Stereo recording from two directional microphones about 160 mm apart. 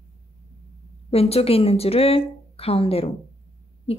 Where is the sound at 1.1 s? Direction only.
40° left (ahead or behind).